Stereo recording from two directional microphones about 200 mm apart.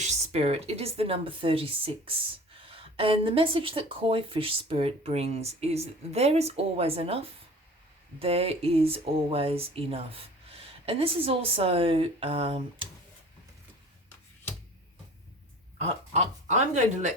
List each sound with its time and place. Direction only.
0.0 s speech: 35° right (ahead or behind)
15.8 s speech: 30° right (ahead or behind)